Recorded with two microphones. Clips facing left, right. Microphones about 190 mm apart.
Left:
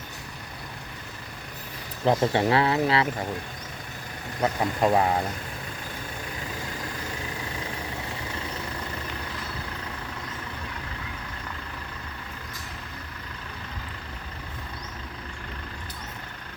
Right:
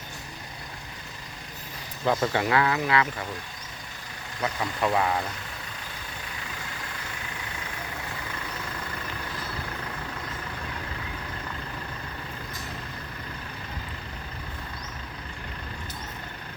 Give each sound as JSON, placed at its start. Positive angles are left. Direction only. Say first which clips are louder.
{"t": 2.0, "sound": "speech", "louder": "left 3 dB", "side_deg": 30}
{"t": 4.4, "sound": "speech", "louder": "left 4 dB", "side_deg": 40}